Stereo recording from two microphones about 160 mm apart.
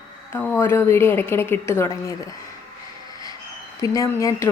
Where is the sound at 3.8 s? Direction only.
20° left (ahead or behind).